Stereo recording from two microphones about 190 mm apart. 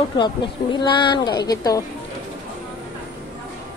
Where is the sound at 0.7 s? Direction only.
25° left (ahead or behind).